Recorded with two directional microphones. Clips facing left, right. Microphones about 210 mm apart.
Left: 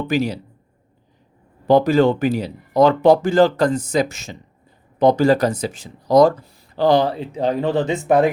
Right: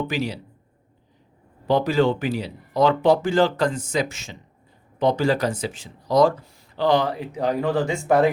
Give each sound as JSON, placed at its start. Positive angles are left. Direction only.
{"t": 0.1, "sound": "speech", "side_deg": 45}
{"t": 1.6, "sound": "speech", "side_deg": 45}